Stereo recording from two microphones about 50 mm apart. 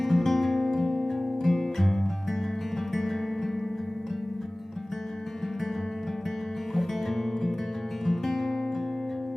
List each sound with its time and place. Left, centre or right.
0.0 s music: centre
6.7 s music: centre